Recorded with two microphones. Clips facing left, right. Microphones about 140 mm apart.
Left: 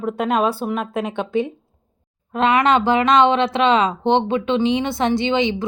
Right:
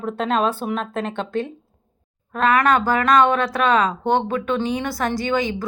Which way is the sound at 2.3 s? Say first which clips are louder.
Left 1 dB; 25° left (ahead or behind).